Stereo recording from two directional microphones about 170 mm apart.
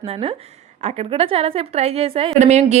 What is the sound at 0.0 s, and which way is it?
A woman's voice, 35° right (ahead or behind).